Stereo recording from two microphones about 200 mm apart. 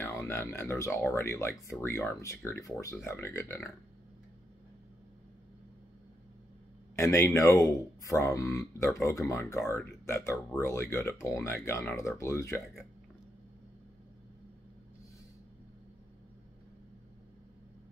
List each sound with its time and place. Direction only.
0.0 s speech: 15° left (ahead or behind)
7.0 s speech: 15° left (ahead or behind)